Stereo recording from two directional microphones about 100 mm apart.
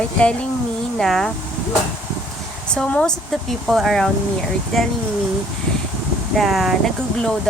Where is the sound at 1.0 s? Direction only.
5° left (ahead or behind).